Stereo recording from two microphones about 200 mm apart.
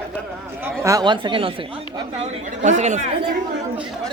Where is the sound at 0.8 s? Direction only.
20° right (ahead or behind); by 3.2 s 35° right (ahead or behind).